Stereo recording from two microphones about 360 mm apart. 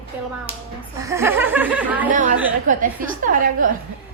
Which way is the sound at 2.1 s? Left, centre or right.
Right.